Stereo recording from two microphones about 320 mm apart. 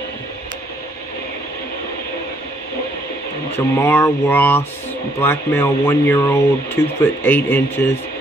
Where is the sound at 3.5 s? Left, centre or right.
Centre.